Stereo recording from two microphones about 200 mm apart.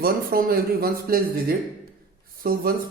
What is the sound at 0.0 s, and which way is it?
Speech, 50° right (ahead or behind).